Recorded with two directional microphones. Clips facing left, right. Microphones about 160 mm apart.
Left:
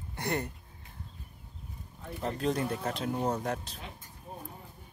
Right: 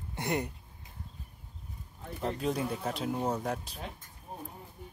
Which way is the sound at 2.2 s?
5° right (ahead or behind).